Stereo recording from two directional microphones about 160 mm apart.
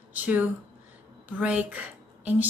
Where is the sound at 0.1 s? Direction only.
10° right (ahead or behind).